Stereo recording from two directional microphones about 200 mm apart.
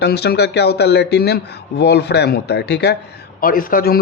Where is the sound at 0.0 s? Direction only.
55° left (ahead or behind).